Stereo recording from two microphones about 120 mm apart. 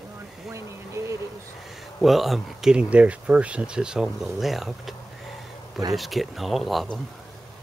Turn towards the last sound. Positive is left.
turn(degrees=0)  # may be behind; listen again after turning